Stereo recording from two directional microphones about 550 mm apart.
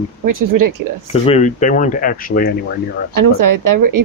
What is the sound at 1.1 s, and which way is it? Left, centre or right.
Speech, centre.